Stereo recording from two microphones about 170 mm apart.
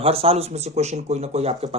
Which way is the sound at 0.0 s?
35° right (ahead or behind).